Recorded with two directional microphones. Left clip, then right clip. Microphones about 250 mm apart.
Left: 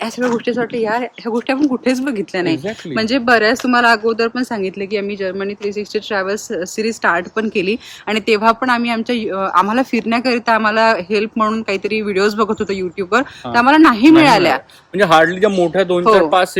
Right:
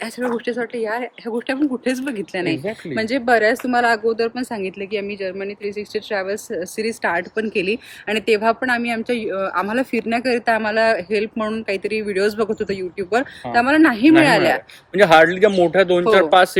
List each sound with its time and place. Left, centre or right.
0.3 s speech: centre
14.9 s a man's voice: centre